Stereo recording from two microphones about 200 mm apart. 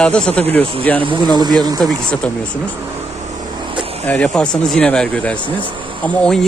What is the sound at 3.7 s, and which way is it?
Vehicle, 25° right (ahead or behind).